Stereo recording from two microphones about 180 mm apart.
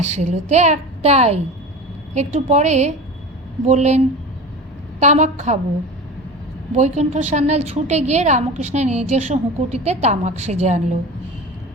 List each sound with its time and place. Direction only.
0.0 s a woman's voice: 40° right (ahead or behind)
6.7 s a woman's voice: 35° right (ahead or behind)